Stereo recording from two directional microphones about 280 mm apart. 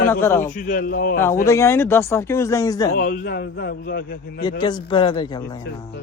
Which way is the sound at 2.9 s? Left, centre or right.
Left.